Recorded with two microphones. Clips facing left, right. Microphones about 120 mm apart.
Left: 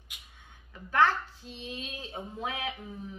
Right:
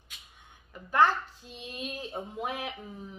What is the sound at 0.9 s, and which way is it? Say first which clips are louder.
A woman's voice: right 1 dB; 15° right (ahead or behind).